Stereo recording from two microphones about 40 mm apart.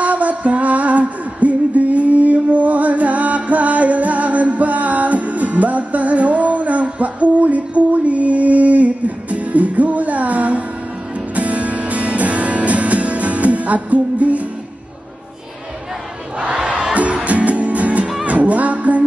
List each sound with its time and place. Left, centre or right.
0.0 s music: right
16.3 s music: right